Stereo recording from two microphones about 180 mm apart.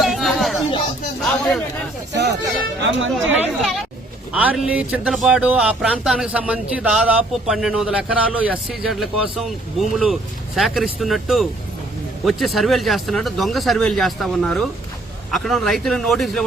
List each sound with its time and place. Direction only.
0.0 s chatter: centre (ahead or behind)
1.2 s a sound: centre (ahead or behind)
2.1 s music: 70° right (ahead or behind); by 3.3 s 85° right
3.4 s speech: centre (ahead or behind)